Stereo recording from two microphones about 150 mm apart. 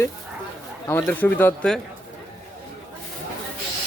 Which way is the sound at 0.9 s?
15° left (ahead or behind).